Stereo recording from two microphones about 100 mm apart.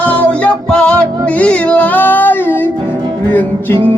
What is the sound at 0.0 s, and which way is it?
Music, 15° left (ahead or behind).